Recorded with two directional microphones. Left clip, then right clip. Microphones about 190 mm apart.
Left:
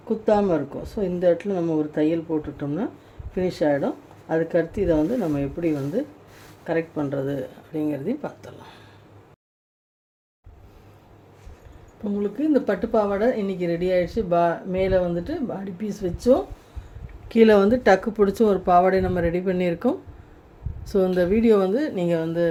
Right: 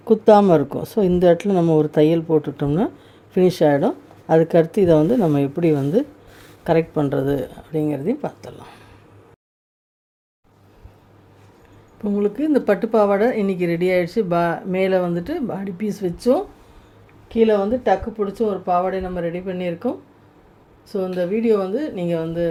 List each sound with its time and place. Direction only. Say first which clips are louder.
0.0 s a woman's voice: right 8 dB; 55° right (ahead or behind); by 8.8 s 30° right (ahead or behind)
12.0 s speech: right 4 dB; 40° right (ahead or behind)
17.2 s speech: left 1 dB; 15° left (ahead or behind); by 22.4 s centre (ahead or behind)